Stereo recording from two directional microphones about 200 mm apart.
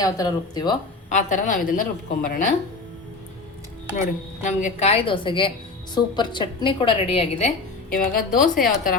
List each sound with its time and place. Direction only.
0.0 s a woman's voice: 20° left (ahead or behind)
1.1 s a woman's voice: 40° left (ahead or behind)
4.4 s a woman's voice: 35° left (ahead or behind)
7.9 s a woman's voice: 45° left (ahead or behind)